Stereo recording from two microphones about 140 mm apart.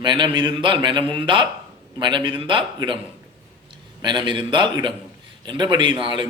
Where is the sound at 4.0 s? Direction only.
30° right (ahead or behind).